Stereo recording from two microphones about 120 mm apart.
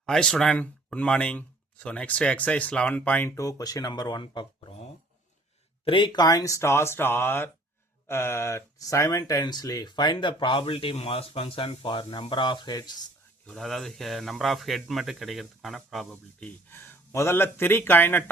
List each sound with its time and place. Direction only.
0.0 s speech: 5° left (ahead or behind)
3.2 s speech: 25° left (ahead or behind)
5.8 s speech: 45° left (ahead or behind)
13.5 s speech: centre (ahead or behind)
16.4 s speech: 15° left (ahead or behind)